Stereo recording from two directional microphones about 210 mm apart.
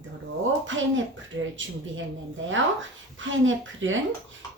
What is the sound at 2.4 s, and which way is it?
A woman's voice, 65° right (ahead or behind).